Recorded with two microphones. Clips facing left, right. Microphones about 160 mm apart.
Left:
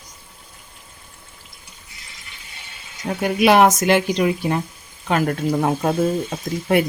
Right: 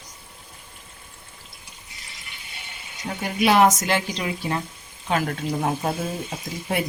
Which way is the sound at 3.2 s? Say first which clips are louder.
Left 4 dB; 60° left (ahead or behind).